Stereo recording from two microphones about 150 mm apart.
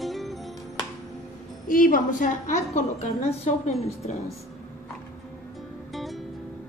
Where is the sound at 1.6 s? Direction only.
65° left (ahead or behind); by 3.7 s 50° left (ahead or behind).